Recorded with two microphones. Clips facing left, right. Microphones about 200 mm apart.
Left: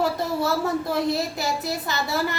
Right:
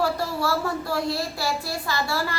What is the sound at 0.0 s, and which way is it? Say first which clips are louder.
A child's voice: left 1 dB; 20° left (ahead or behind).